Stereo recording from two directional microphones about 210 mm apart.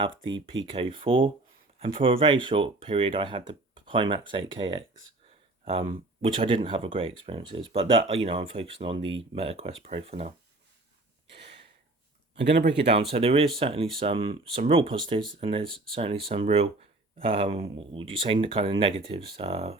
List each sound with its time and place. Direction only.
0.0 s speech: 20° right (ahead or behind)
6.2 s speech: 25° right (ahead or behind)
11.3 s gasp: 55° right (ahead or behind)
12.4 s speech: 55° right (ahead or behind)
12.9 s speech: 30° right (ahead or behind)